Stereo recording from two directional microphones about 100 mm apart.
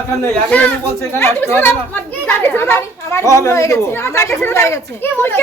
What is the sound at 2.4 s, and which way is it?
Children playing, 20° left (ahead or behind).